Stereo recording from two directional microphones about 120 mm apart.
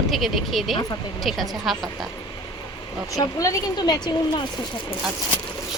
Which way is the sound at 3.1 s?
30° left (ahead or behind).